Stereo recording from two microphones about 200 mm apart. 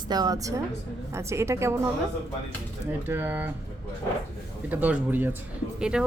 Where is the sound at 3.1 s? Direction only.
10° right (ahead or behind).